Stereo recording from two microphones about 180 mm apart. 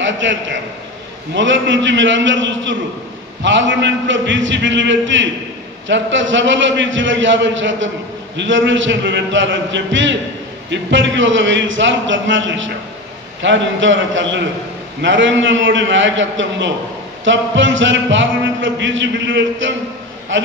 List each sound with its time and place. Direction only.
0.0 s a man's voice: 90° right